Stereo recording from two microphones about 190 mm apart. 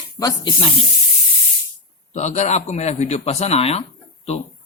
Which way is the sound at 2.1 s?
35° left (ahead or behind).